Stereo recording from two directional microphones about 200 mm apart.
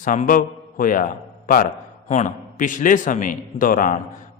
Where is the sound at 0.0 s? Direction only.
40° left (ahead or behind).